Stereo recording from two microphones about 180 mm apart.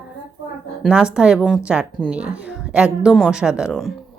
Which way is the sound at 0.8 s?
5° right (ahead or behind).